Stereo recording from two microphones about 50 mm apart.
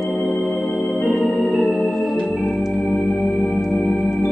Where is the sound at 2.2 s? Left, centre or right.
Centre.